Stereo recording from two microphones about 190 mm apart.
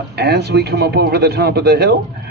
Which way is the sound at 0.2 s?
60° right (ahead or behind).